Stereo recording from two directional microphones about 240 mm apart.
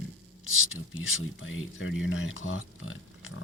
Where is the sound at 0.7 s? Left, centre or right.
Left.